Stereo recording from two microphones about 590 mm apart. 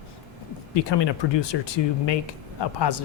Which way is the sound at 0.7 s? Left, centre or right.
Left.